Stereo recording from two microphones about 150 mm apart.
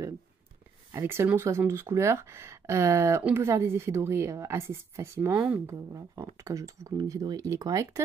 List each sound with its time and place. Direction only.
0.9 s a woman's voice: 15° right (ahead or behind)